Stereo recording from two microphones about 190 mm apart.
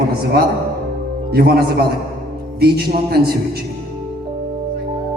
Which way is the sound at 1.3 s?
55° right (ahead or behind).